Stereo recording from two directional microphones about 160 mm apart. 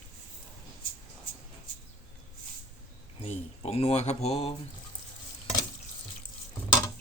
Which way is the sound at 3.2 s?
40° left (ahead or behind).